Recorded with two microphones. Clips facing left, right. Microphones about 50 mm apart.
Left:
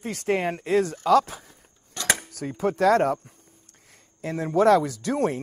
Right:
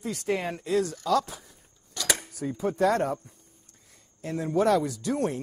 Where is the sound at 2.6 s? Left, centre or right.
Left.